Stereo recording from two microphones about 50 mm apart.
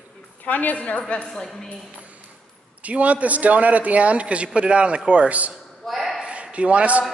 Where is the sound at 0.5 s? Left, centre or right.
Left.